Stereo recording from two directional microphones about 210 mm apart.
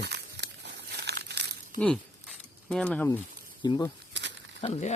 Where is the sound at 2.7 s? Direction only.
5° left (ahead or behind).